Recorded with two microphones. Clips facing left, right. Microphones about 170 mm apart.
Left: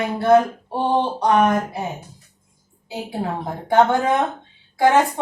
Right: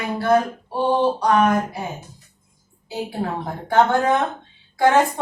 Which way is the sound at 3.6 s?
15° left (ahead or behind).